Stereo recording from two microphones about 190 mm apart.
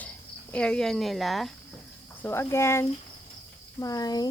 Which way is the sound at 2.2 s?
10° left (ahead or behind).